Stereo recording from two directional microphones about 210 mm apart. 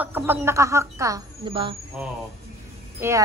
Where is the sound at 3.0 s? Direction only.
10° right (ahead or behind).